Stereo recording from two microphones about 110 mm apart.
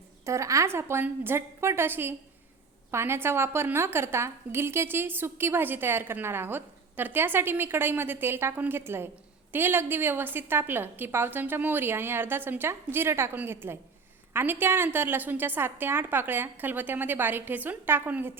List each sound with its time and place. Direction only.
0.3 s a woman's voice: 30° right (ahead or behind)